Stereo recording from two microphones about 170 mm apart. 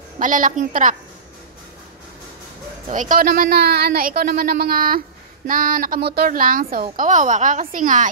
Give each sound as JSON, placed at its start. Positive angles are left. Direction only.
{"t": 0.2, "sound": "a woman's voice", "side_deg": -50}
{"t": 2.9, "sound": "a woman's voice", "side_deg": -50}